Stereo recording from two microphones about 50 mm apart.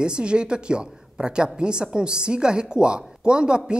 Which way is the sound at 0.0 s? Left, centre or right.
Centre.